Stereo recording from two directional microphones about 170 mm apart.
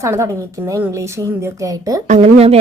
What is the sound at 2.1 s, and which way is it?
Speech, 40° right (ahead or behind).